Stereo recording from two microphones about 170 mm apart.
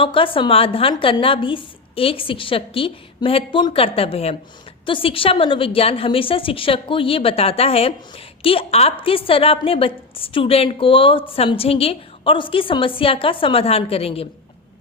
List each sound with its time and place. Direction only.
0.0 s a woman's voice: 30° left (ahead or behind)